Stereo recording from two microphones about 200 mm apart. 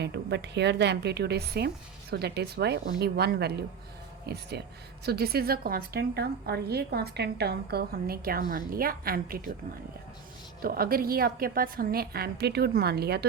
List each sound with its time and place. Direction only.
0.0 s a woman's voice: 60° right (ahead or behind)
10.6 s a woman's voice: 50° right (ahead or behind)